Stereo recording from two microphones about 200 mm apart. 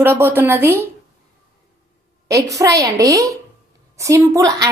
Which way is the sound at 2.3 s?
15° right (ahead or behind).